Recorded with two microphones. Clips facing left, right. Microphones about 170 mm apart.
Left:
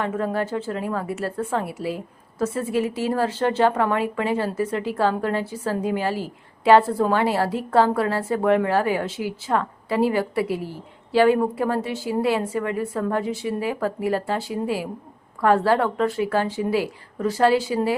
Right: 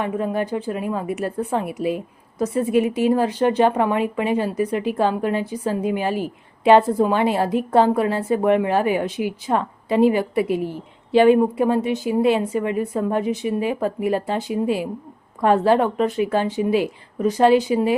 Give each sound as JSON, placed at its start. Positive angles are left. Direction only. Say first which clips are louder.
{"t": 0.0, "sound": "a woman's voice", "louder": "right 2 dB", "side_deg": -15}